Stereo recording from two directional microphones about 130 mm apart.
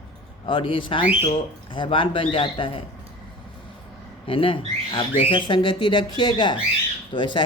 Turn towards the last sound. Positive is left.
turn(degrees=40)  # may be behind; listen again after turning